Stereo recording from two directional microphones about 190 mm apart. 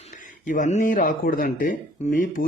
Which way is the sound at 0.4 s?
40° left (ahead or behind).